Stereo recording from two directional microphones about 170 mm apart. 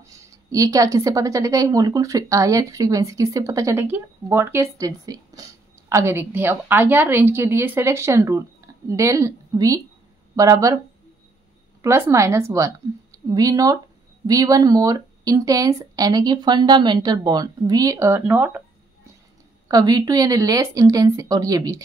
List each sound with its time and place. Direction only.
0.2 s speech: 20° right (ahead or behind)
11.8 s speech: 15° right (ahead or behind)
19.7 s speech: 20° right (ahead or behind)